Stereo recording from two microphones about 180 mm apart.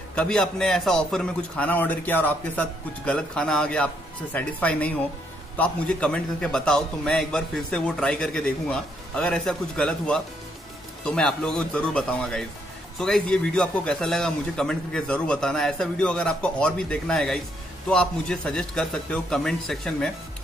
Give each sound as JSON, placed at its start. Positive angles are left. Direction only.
{"t": 0.1, "sound": "a man's voice", "side_deg": 5}